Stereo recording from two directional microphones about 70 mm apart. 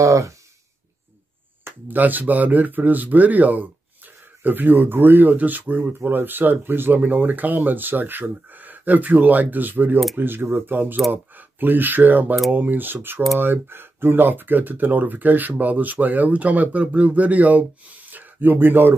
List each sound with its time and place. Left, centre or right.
0.0 s speech: right
1.6 s speech: right